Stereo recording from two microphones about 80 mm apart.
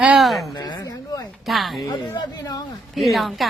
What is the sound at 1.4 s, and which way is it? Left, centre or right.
Speech, centre.